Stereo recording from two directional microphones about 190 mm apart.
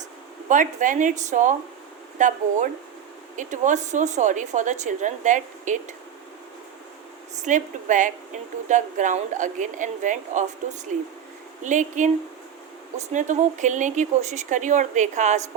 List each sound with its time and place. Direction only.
0.4 s a woman's voice: 40° right (ahead or behind)
7.4 s a woman's voice: 40° right (ahead or behind)
13.1 s a woman's voice: 40° right (ahead or behind)